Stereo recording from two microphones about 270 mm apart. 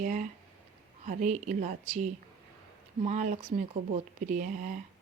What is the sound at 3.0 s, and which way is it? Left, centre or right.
A woman's voice, right.